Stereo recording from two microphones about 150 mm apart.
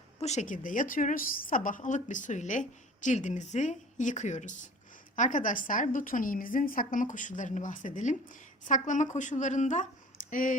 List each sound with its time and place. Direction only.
0.2 s a woman's voice: 50° left (ahead or behind)